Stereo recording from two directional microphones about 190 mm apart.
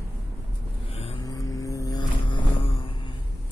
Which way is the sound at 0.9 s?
30° left (ahead or behind).